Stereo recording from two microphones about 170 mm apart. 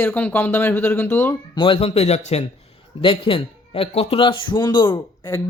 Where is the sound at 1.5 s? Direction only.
30° left (ahead or behind).